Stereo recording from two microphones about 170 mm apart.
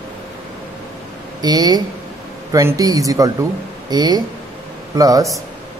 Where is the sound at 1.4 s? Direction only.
25° right (ahead or behind).